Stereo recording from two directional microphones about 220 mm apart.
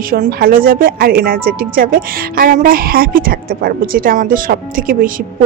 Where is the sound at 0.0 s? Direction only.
40° right (ahead or behind).